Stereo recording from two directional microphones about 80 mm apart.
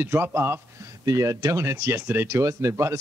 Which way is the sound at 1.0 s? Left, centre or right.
Right.